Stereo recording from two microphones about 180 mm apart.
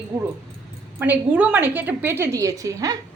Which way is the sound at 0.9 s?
10° right (ahead or behind).